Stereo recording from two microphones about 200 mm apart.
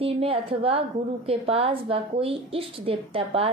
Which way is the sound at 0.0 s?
30° right (ahead or behind).